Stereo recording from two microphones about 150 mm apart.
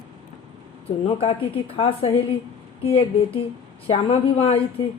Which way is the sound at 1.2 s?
40° left (ahead or behind).